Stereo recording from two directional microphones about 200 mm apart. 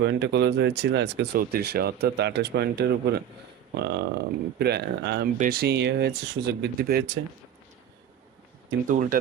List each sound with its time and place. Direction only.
0.0 s speech: 60° right (ahead or behind)
8.9 s speech: 40° right (ahead or behind)